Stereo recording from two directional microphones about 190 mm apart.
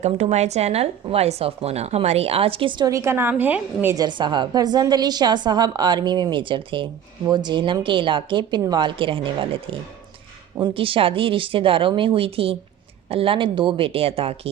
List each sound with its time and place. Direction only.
0.0 s speech: 35° right (ahead or behind)